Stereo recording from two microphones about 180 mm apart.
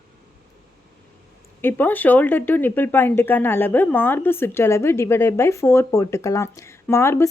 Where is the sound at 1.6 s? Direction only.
10° left (ahead or behind).